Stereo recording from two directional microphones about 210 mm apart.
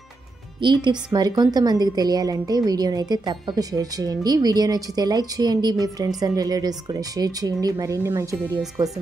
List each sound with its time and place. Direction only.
0.6 s a woman's voice: 20° right (ahead or behind)